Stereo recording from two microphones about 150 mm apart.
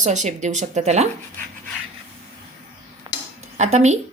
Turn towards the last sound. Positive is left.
turn(degrees=-50)  # may be behind; listen again after turning